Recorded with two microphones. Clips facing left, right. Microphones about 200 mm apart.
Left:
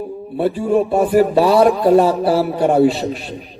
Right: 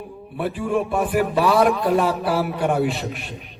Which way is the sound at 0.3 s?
30° left (ahead or behind).